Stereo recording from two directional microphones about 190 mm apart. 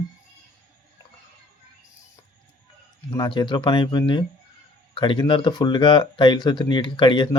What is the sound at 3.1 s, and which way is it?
Speech, 20° left (ahead or behind).